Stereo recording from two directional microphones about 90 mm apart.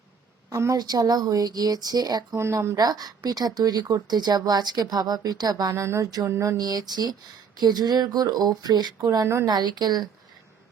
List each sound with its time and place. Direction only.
0.5 s speech: 40° right (ahead or behind)
2.3 s speech: 35° right (ahead or behind)
2.7 s speech: 50° right (ahead or behind)
5.7 s speech: 35° right (ahead or behind)
6.1 s speech: 45° right (ahead or behind)
6.3 s a sound: 30° right (ahead or behind)
6.6 s speech: 50° right (ahead or behind)
9.0 s speech: 35° right (ahead or behind)
9.5 s speech: 55° right (ahead or behind)